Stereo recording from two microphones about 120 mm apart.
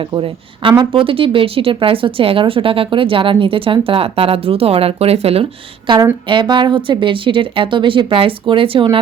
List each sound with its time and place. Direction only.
0.2 s speech: 45° right (ahead or behind)
5.9 s a woman's voice: 40° right (ahead or behind)